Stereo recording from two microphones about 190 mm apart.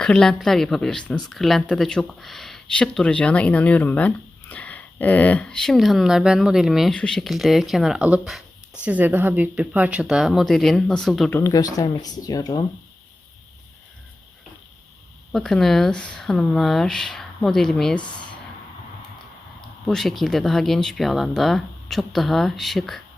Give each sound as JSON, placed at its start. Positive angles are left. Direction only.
{"t": 0.0, "sound": "speech", "side_deg": 5}
{"t": 11.3, "sound": "speech", "side_deg": 15}
{"t": 15.3, "sound": "speech", "side_deg": 0}
{"t": 19.9, "sound": "speech", "side_deg": 0}